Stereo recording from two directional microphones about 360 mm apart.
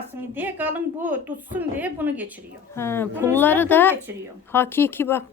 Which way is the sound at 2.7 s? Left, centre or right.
Centre.